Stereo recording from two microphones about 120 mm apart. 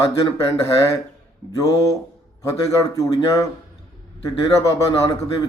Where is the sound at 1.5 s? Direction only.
30° left (ahead or behind).